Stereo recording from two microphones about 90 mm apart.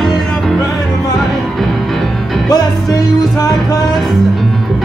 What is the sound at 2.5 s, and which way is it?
Music, 45° left (ahead or behind).